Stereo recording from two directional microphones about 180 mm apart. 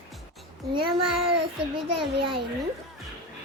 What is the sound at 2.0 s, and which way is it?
Speech, 30° right (ahead or behind).